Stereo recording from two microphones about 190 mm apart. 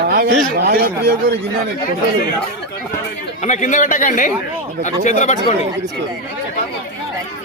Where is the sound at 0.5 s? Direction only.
55° right (ahead or behind).